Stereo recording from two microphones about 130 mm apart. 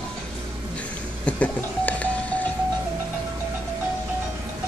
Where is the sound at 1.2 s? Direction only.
10° left (ahead or behind).